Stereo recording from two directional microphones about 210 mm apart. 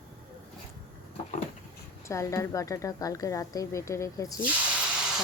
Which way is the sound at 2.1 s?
15° left (ahead or behind).